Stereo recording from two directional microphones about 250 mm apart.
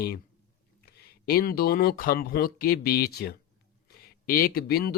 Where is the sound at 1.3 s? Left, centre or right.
Left.